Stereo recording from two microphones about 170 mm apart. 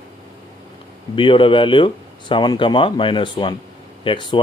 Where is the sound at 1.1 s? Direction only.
30° left (ahead or behind).